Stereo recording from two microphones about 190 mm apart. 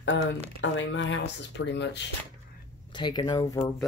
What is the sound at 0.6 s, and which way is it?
Speech, 75° left (ahead or behind).